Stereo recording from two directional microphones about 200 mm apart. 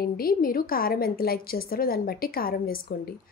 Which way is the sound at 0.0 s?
50° left (ahead or behind).